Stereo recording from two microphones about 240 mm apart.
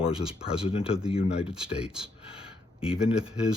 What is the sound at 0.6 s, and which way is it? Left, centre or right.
Speech, left.